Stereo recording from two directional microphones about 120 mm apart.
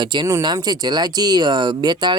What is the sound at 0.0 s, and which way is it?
Speech, 40° right (ahead or behind).